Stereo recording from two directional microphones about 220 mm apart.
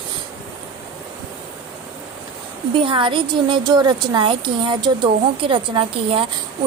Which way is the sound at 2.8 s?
20° right (ahead or behind).